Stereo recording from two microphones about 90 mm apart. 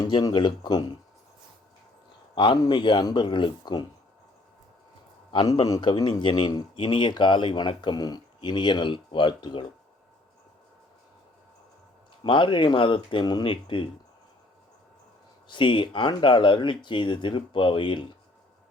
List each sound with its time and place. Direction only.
0.1 s speech: 55° left (ahead or behind)
2.3 s speech: 60° left (ahead or behind)
5.8 s speech: 60° left (ahead or behind)
12.2 s speech: 65° left (ahead or behind)
15.4 s speech: 65° left (ahead or behind)